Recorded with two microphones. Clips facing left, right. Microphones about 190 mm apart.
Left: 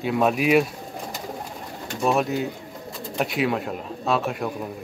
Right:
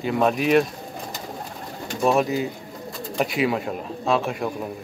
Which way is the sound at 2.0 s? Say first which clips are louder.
Right 2 dB; centre (ahead or behind).